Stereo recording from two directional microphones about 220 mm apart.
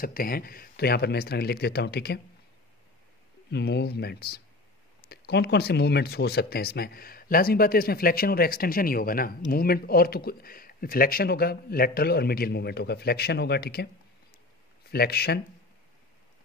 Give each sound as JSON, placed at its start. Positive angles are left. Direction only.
{"t": 0.0, "sound": "speech", "side_deg": 40}
{"t": 3.4, "sound": "speech", "side_deg": 50}
{"t": 14.9, "sound": "speech", "side_deg": 45}